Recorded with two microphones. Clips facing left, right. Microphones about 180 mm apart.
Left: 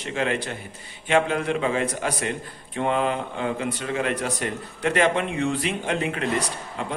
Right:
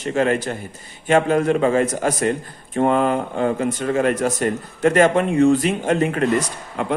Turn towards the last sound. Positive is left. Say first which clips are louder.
# right 6 dB
turn(degrees=-55)  # may be behind; listen again after turning